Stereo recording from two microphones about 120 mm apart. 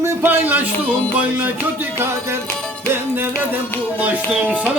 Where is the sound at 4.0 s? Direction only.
15° right (ahead or behind).